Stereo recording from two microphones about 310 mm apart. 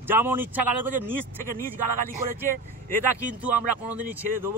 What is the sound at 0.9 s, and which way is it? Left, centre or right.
Speech, right.